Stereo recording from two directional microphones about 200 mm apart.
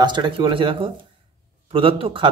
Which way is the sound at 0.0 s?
25° right (ahead or behind).